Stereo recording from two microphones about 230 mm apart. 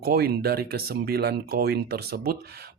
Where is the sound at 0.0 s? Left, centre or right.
Right.